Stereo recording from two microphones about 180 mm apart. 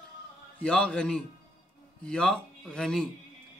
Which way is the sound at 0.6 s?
5° left (ahead or behind).